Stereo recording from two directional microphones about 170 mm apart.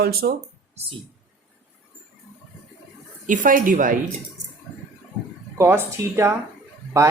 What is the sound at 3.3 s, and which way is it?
Speech, 50° right (ahead or behind).